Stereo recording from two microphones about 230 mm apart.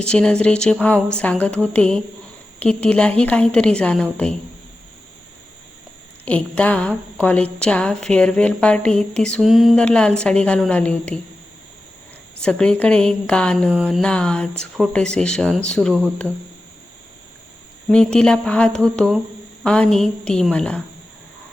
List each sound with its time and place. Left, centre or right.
0.0 s a woman's voice: centre
6.2 s a woman's voice: centre
12.4 s a woman's voice: centre
17.8 s a woman's voice: centre